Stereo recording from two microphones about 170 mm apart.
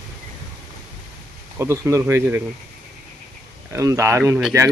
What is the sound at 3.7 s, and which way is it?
Speech, 20° right (ahead or behind).